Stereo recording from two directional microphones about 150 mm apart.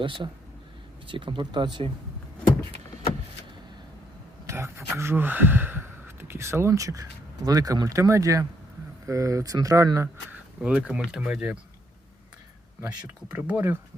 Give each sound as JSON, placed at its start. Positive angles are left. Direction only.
{"t": 0.0, "sound": "speech", "side_deg": -35}
{"t": 4.4, "sound": "speech", "side_deg": -15}
{"t": 10.6, "sound": "speech", "side_deg": -10}
{"t": 13.3, "sound": "speech", "side_deg": -15}